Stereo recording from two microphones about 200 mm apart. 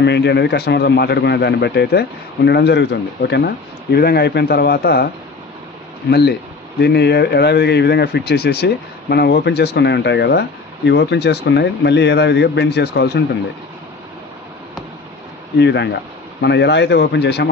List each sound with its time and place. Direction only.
0.0 s speech: 60° left (ahead or behind)
6.0 s speech: 55° left (ahead or behind)
15.6 s speech: 60° left (ahead or behind)